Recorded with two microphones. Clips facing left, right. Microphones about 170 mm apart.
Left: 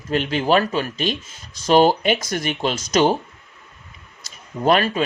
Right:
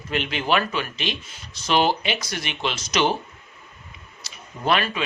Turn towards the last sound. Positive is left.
turn(degrees=40)  # may be behind; listen again after turning